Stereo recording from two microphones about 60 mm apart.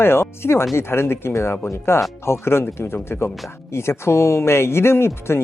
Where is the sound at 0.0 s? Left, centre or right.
Left.